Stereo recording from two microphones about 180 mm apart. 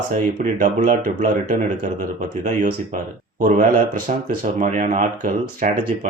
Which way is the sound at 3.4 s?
45° right (ahead or behind).